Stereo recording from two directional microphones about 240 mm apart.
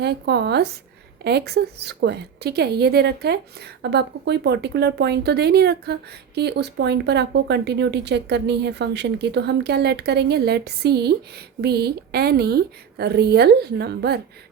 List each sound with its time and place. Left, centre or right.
0.0 s speech: right